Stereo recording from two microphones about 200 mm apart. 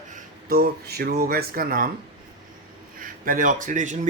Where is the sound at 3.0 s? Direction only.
45° right (ahead or behind).